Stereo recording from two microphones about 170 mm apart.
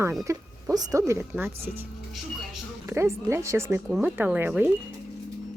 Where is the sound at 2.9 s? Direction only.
15° right (ahead or behind).